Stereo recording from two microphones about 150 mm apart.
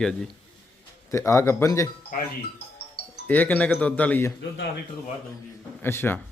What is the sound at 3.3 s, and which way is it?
A man's voice, 10° left (ahead or behind).